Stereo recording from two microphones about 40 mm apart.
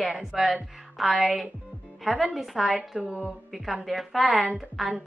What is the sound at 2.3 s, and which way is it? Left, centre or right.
Speech, centre.